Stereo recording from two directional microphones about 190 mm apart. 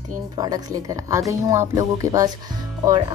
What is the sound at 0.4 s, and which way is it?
Speech, 20° right (ahead or behind).